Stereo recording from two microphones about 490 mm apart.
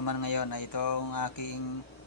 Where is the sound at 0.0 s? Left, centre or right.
Left.